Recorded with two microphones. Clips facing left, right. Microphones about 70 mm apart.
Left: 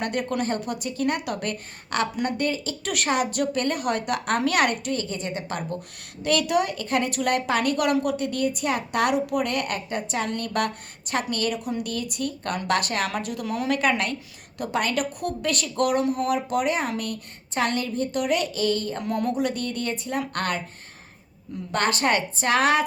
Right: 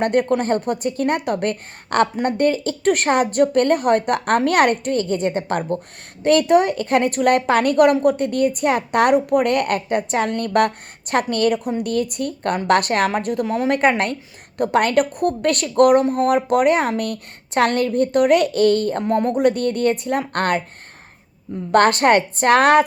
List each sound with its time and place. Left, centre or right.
0.0 s a woman's voice: right
21.7 s a woman's voice: right